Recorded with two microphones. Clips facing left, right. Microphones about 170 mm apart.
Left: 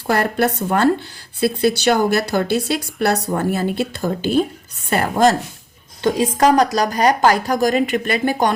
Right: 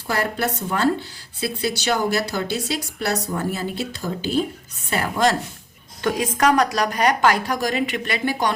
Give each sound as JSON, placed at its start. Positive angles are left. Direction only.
{"t": 0.1, "sound": "a woman's voice", "side_deg": 55}
{"t": 6.0, "sound": "a woman's voice", "side_deg": 30}